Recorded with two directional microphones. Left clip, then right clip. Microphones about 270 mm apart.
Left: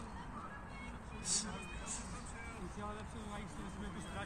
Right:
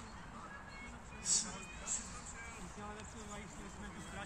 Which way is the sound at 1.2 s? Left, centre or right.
Centre.